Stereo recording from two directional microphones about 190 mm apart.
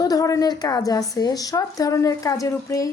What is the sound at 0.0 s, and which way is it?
A woman's voice, 20° left (ahead or behind).